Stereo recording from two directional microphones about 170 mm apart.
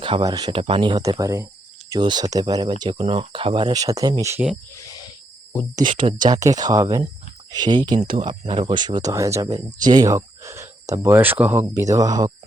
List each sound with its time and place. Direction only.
0.0 s speech: 25° right (ahead or behind)
4.7 s a sound: 20° left (ahead or behind)
5.7 s speech: 30° right (ahead or behind)
7.9 s speech: 55° right (ahead or behind)
8.2 s speech: 30° right (ahead or behind)